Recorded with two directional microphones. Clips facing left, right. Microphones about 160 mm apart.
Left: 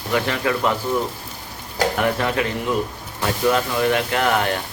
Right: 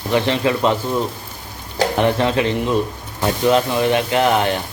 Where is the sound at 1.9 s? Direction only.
25° right (ahead or behind).